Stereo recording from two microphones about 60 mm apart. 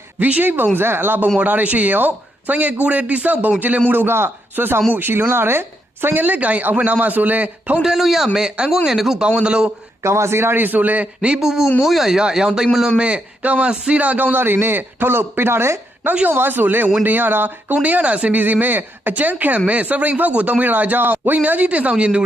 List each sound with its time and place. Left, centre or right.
0.2 s a man's voice: right
3.8 s a man's voice: right
7.8 s a man's voice: centre
8.4 s speech: centre
10.0 s a man's voice: right; by 11.3 s centre
11.3 s a man's voice: centre
13.0 s a man's voice: centre